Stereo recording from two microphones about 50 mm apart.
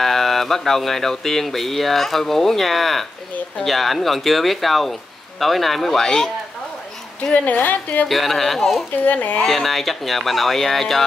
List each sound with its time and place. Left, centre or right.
0.0 s speech: centre
7.3 s a woman's voice: left
8.1 s speech: centre
9.0 s a woman's voice: left
9.5 s speech: centre